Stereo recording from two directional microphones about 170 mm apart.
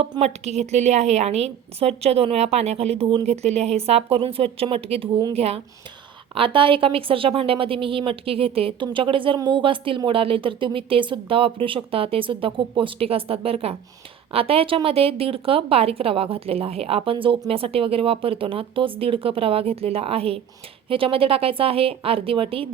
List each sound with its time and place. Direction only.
0.0 s a woman's voice: 35° right (ahead or behind)